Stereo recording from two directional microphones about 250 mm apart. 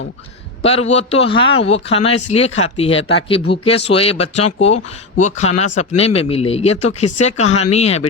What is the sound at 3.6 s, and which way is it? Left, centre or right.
Speech, left.